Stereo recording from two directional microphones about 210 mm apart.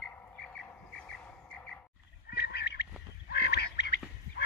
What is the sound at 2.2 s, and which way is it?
Duck, 50° left (ahead or behind).